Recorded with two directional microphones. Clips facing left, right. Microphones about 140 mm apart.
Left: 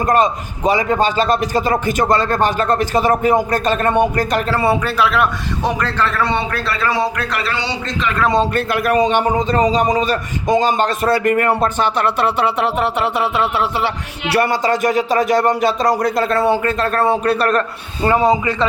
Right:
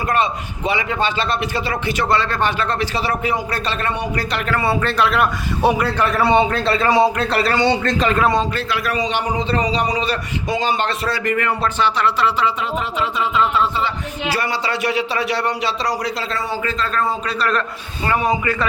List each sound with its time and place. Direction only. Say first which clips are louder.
0.0 s a man's voice: left 5 dB; 40° left (ahead or behind)
4.4 s a man's voice: even; 25° left (ahead or behind)
4.8 s a man's voice: left 1 dB; 5° left (ahead or behind)
5.6 s a man's voice: right 2 dB; 10° right (ahead or behind); by 7.9 s 50° right (ahead or behind)
8.5 s a man's voice: left 6 dB; 50° left (ahead or behind)
18.1 s a man's voice: left 4 dB; 25° left (ahead or behind)